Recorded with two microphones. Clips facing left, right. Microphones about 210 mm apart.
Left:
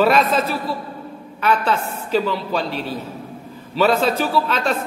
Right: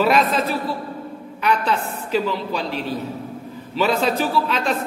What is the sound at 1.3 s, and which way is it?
A man's voice, 15° right (ahead or behind).